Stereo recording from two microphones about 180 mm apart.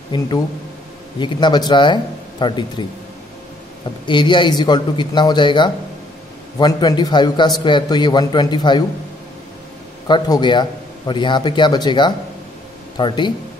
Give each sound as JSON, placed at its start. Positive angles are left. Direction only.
{"t": 0.1, "sound": "a man's voice", "side_deg": 25}
{"t": 4.0, "sound": "a man's voice", "side_deg": 25}
{"t": 10.0, "sound": "a man's voice", "side_deg": 25}